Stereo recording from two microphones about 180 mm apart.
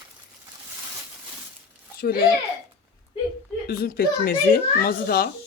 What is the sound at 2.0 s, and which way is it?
Speech, 55° left (ahead or behind).